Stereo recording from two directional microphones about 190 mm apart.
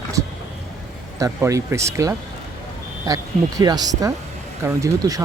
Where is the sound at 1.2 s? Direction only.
15° right (ahead or behind).